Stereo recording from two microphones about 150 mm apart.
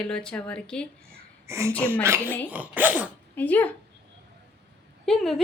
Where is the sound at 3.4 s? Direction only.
10° left (ahead or behind).